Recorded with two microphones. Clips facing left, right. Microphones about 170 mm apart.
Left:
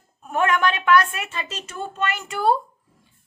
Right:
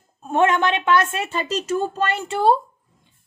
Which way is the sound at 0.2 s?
25° right (ahead or behind).